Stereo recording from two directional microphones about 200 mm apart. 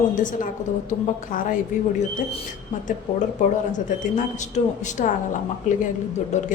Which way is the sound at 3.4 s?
40° left (ahead or behind).